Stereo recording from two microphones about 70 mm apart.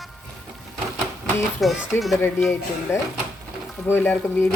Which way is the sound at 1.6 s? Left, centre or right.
Centre.